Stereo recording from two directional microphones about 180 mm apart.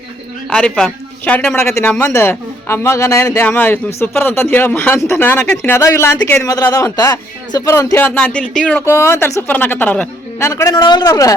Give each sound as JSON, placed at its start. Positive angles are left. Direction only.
{"t": 0.5, "sound": "a man's voice", "side_deg": 5}
{"t": 10.5, "sound": "a man's voice", "side_deg": 20}